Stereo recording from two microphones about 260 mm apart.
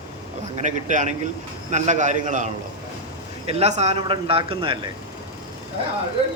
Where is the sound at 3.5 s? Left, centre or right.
Right.